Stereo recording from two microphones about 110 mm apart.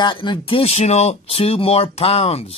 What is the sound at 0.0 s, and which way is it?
Speech, 45° left (ahead or behind).